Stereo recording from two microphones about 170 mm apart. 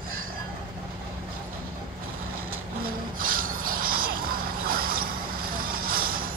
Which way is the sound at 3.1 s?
55° right (ahead or behind).